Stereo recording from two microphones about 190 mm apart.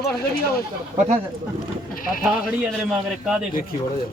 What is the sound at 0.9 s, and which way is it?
Speech, 40° right (ahead or behind).